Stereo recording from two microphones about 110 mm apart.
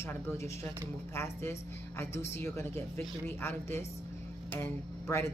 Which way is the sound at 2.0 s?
20° left (ahead or behind).